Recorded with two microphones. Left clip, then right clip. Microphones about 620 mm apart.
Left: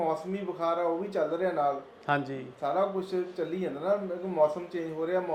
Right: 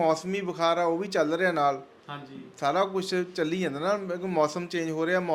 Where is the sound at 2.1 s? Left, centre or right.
Left.